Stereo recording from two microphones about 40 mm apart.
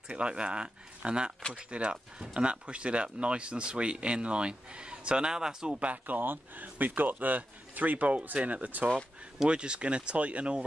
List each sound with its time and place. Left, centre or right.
0.1 s speech: right
5.8 s speech: right
9.5 s speech: right